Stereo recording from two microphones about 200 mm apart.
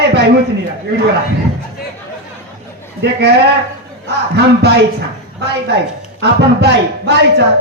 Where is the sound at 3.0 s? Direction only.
55° right (ahead or behind).